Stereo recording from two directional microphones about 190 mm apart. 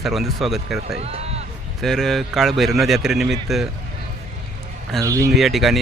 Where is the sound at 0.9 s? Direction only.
35° right (ahead or behind).